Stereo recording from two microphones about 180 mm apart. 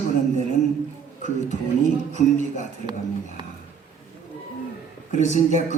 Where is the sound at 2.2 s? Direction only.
45° left (ahead or behind).